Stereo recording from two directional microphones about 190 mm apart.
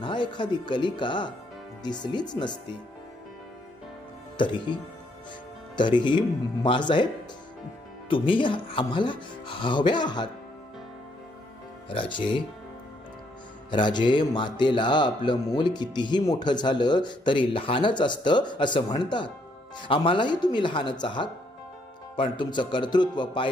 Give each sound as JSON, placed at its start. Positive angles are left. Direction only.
{"t": 0.0, "sound": "a man's voice", "side_deg": 25}
{"t": 4.4, "sound": "a man's voice", "side_deg": 25}
{"t": 8.1, "sound": "a man's voice", "side_deg": 25}
{"t": 11.9, "sound": "a man's voice", "side_deg": 25}
{"t": 13.7, "sound": "a man's voice", "side_deg": 25}